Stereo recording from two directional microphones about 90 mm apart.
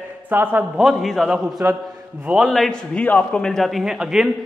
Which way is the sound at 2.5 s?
Centre (ahead or behind).